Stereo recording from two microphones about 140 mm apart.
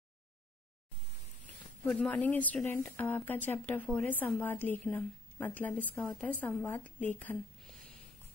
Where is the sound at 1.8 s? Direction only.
10° left (ahead or behind).